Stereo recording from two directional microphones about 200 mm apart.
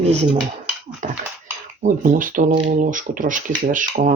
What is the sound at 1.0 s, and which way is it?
Speech, 40° right (ahead or behind).